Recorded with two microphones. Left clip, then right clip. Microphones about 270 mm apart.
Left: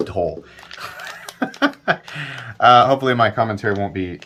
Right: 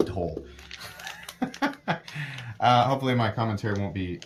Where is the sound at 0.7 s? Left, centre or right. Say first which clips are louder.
Left 9 dB; centre.